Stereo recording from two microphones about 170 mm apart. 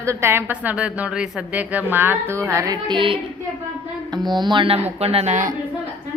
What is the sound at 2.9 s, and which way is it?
Female singing, 30° right (ahead or behind).